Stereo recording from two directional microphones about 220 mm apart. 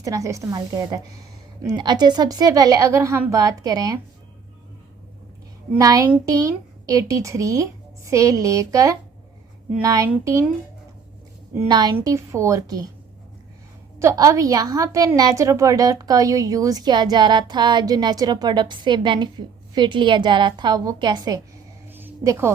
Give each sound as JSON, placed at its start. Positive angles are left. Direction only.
{"t": 0.0, "sound": "a woman's voice", "side_deg": -15}
{"t": 5.8, "sound": "a woman's voice", "side_deg": -15}
{"t": 11.5, "sound": "a woman's voice", "side_deg": -20}
{"t": 14.0, "sound": "a woman's voice", "side_deg": -15}
{"t": 21.8, "sound": "a sound", "side_deg": -10}